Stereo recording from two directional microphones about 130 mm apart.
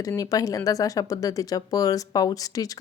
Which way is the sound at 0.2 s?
25° left (ahead or behind).